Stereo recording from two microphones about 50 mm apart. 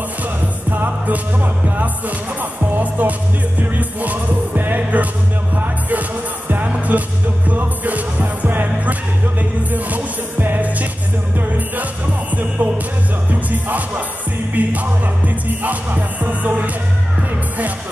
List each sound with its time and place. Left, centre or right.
0.7 s music: right
6.5 s music: right